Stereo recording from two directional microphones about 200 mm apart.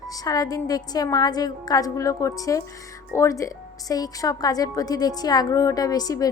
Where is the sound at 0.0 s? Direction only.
20° left (ahead or behind).